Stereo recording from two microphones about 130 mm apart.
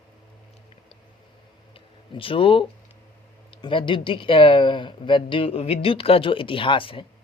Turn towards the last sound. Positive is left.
turn(degrees=40)  # may be behind; listen again after turning